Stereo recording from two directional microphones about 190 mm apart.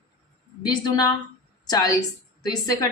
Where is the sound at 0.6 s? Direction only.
20° left (ahead or behind).